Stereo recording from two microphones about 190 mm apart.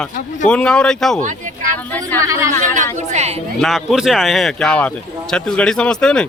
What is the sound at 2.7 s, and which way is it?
Chatter, 40° right (ahead or behind).